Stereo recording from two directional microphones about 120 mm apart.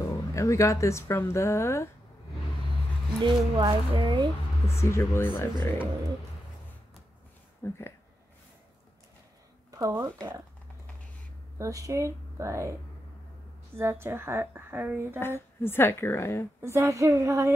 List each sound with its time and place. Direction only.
0.0 s speech: 25° left (ahead or behind)
3.5 s speech: 40° right (ahead or behind)
4.6 s a woman's voice: 20° left (ahead or behind)
7.6 s speech: 25° left (ahead or behind)
9.7 s speech: 25° right (ahead or behind)
11.5 s speech: 25° right (ahead or behind)
13.7 s speech: 20° right (ahead or behind)
15.1 s a woman's voice: 20° left (ahead or behind)
16.6 s speech: 25° right (ahead or behind)